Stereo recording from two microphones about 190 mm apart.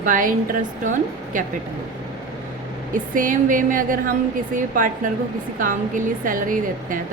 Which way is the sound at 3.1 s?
45° right (ahead or behind).